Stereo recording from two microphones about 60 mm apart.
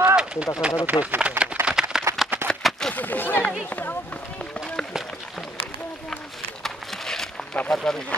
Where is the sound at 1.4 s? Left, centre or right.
Centre.